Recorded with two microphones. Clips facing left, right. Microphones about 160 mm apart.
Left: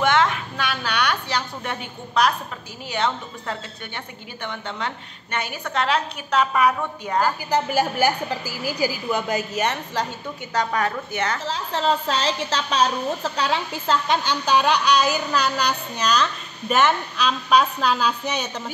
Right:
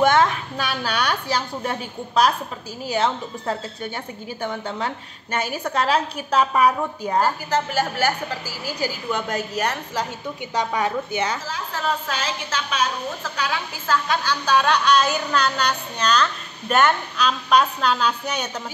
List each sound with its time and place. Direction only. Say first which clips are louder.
0.0 s a sound: right 2 dB; 40° right (ahead or behind)
2.9 s a woman's voice: right 2 dB; 30° right (ahead or behind)
7.4 s a woman's voice: left 1 dB; 15° left (ahead or behind)
10.5 s a woman's voice: even; 20° right (ahead or behind)
11.4 s a woman's voice: left 3 dB; 30° left (ahead or behind); by 18.5 s 5° left (ahead or behind)